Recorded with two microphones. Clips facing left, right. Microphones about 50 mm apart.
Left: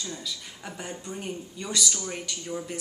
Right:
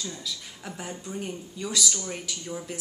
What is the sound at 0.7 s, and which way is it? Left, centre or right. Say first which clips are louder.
Speech: even; centre.